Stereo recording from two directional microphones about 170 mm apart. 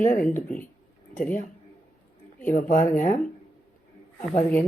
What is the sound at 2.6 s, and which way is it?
Speech, 50° left (ahead or behind).